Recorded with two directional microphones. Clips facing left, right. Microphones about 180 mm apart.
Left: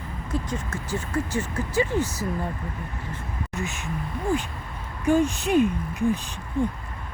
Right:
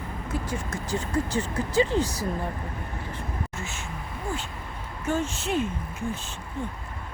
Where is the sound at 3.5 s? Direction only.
15° left (ahead or behind).